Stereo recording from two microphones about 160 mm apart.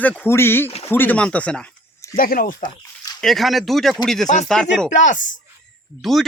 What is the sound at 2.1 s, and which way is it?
Speech, 65° left (ahead or behind).